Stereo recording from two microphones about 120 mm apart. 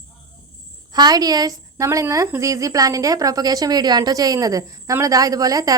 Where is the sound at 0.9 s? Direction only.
35° right (ahead or behind).